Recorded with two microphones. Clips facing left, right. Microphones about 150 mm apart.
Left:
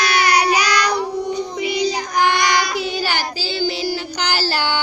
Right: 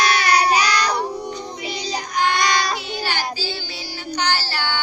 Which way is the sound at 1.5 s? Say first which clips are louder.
Left 7 dB; 90° left.